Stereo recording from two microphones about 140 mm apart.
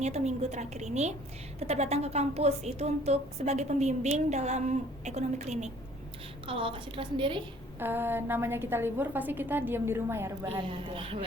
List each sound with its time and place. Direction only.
0.0 s a woman's voice: 55° right (ahead or behind)
6.5 s a woman's voice: 40° right (ahead or behind)
7.8 s a woman's voice: 15° right (ahead or behind)
10.6 s a woman's voice: 40° right (ahead or behind)